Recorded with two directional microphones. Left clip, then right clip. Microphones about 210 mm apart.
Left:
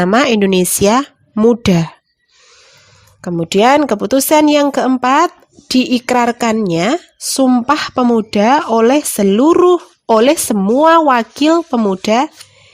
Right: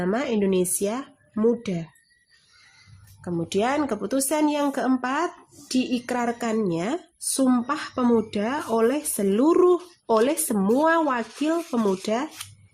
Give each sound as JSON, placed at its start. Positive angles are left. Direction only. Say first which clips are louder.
{"t": 0.0, "sound": "speech", "louder": "left 13 dB", "side_deg": 45}
{"t": 3.2, "sound": "speech", "louder": "left 12 dB", "side_deg": 40}